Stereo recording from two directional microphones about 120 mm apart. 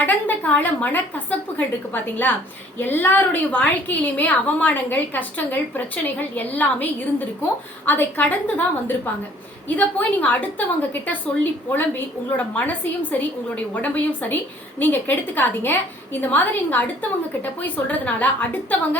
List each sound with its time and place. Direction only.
0.0 s a woman's voice: 15° left (ahead or behind)